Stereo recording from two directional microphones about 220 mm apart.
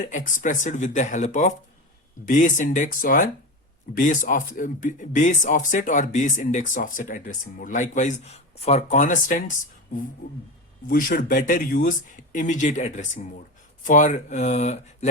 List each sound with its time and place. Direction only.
0.1 s speech: 35° left (ahead or behind)
10.8 s speech: 40° left (ahead or behind)